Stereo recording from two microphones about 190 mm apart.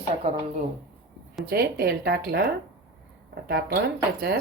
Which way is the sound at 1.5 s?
55° right (ahead or behind).